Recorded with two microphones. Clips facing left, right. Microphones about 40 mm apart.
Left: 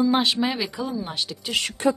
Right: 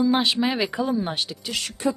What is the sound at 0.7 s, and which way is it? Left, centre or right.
Speech, right.